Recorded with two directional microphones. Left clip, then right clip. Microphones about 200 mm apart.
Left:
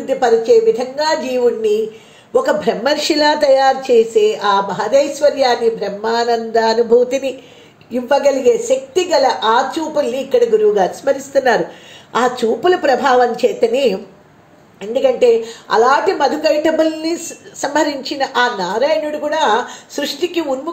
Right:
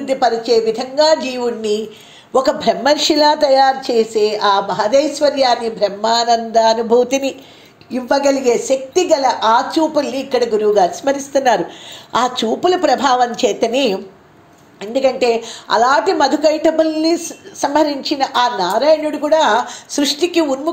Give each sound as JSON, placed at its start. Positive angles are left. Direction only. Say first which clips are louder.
{"t": 0.2, "sound": "a woman's voice", "louder": "left 4 dB", "side_deg": -35}